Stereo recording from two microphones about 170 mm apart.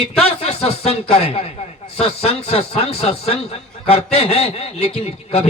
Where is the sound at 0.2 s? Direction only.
35° left (ahead or behind).